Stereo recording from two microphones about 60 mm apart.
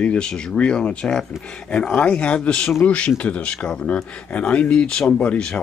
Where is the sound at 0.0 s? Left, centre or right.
Centre.